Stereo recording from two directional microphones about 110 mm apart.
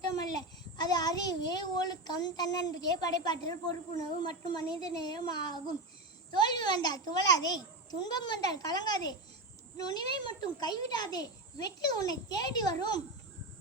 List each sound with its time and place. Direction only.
0.1 s a child's voice: 35° left (ahead or behind)